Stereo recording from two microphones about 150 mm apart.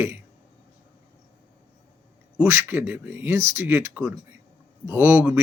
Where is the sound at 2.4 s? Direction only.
15° right (ahead or behind).